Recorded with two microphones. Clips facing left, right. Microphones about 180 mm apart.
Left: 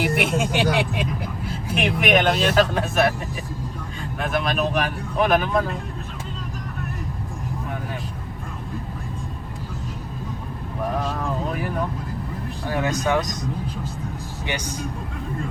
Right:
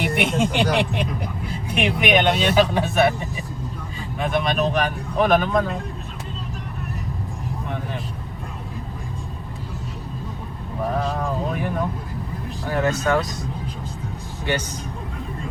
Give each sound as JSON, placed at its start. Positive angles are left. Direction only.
{"t": 0.0, "sound": "speech", "side_deg": 5}
{"t": 11.0, "sound": "a sound", "side_deg": 0}
{"t": 12.7, "sound": "speech", "side_deg": 15}